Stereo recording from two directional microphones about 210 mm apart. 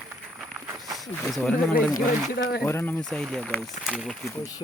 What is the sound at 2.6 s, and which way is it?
Speech, 10° left (ahead or behind).